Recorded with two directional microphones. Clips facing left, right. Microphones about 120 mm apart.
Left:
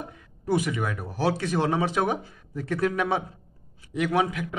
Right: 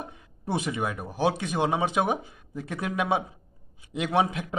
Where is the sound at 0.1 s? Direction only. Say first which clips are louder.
Left 7 dB; 25° right (ahead or behind).